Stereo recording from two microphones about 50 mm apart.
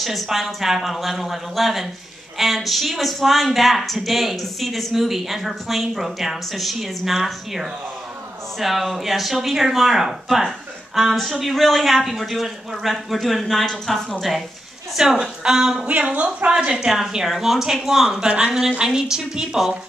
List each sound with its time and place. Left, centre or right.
0.0 s speech: centre
15.0 s speech: centre
15.8 s speech: right
16.4 s speech: centre